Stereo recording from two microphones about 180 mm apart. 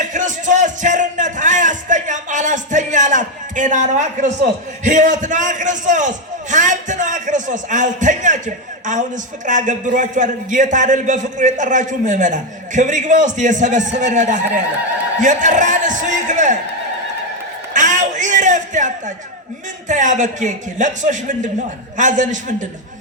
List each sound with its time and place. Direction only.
0.0 s music: 45° right (ahead or behind)
4.8 s a man's voice: 45° right (ahead or behind)
17.7 s a sound: 45° right (ahead or behind)
19.9 s a man's voice: 45° right (ahead or behind)